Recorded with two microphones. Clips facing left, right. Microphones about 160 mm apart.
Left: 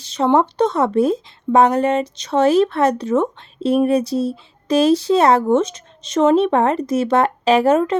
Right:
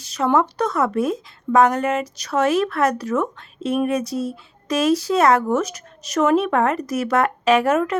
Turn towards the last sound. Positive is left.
turn(degrees=30)  # may be behind; listen again after turning